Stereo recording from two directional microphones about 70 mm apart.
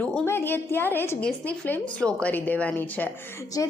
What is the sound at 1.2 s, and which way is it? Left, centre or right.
A woman's voice, centre.